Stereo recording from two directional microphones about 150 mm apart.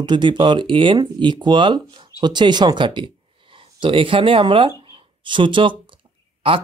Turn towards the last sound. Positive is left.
turn(degrees=-35)  # may be behind; listen again after turning